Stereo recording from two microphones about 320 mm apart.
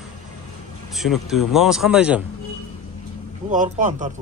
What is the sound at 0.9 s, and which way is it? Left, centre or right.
Speech, centre.